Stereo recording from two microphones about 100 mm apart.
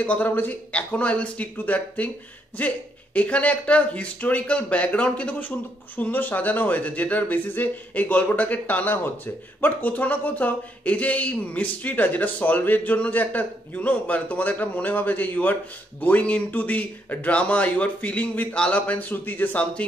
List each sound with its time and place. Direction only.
0.0 s speech: 15° left (ahead or behind)